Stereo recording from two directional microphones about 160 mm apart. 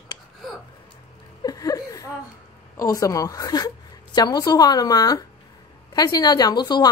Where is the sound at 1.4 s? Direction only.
25° left (ahead or behind).